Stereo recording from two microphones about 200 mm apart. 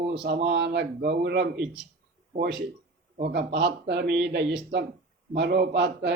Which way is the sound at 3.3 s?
55° right (ahead or behind).